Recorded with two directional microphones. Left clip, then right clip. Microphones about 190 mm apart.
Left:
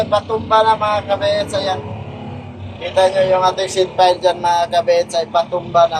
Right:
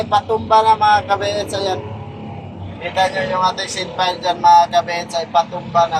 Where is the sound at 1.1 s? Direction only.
35° right (ahead or behind).